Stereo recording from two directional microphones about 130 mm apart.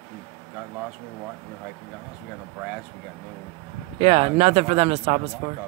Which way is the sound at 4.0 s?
55° right (ahead or behind).